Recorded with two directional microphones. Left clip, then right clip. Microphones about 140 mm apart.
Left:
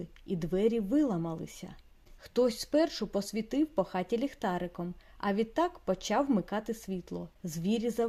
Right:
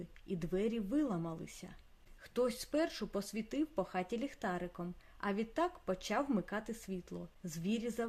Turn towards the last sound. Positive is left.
turn(degrees=30)  # may be behind; listen again after turning